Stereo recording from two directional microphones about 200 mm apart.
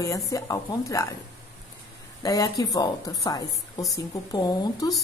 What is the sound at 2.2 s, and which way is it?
A woman's voice, 20° left (ahead or behind).